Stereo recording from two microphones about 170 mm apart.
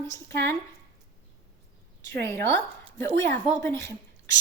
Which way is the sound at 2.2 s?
15° left (ahead or behind).